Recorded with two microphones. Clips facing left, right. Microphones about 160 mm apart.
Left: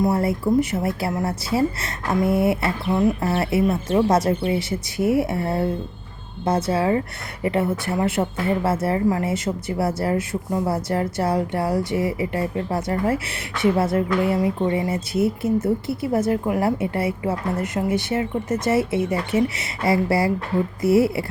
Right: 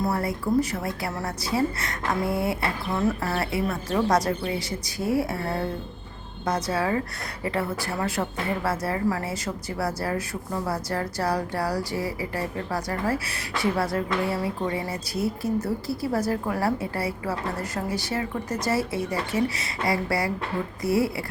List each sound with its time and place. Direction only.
0.0 s a woman's voice: 25° left (ahead or behind)